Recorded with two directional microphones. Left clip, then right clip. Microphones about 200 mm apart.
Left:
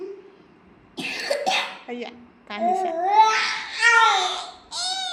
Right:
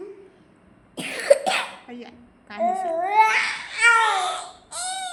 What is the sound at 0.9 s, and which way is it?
Cough, 30° right (ahead or behind).